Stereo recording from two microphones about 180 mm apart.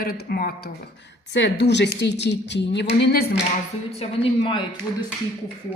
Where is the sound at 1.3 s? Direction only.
70° left (ahead or behind).